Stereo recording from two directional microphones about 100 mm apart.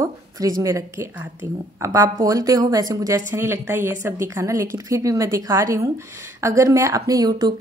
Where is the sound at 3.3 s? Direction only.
25° right (ahead or behind); by 7.5 s 40° right (ahead or behind).